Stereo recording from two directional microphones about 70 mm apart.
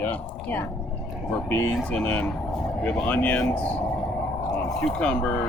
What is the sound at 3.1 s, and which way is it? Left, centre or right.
Speech, left.